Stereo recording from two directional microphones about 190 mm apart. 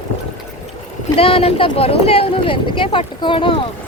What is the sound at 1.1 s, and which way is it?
Speech, 30° left (ahead or behind).